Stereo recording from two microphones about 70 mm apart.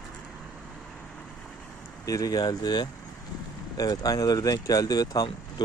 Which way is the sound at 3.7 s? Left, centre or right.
Left.